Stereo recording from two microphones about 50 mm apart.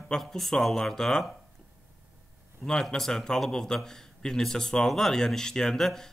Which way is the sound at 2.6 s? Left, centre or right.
Centre.